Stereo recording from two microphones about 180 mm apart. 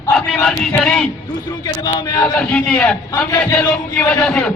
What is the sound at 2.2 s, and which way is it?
Speech, 5° left (ahead or behind).